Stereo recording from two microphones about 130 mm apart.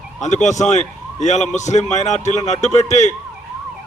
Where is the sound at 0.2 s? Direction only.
65° left (ahead or behind).